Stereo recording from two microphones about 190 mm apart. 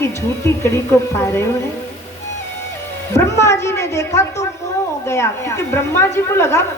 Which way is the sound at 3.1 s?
15° left (ahead or behind).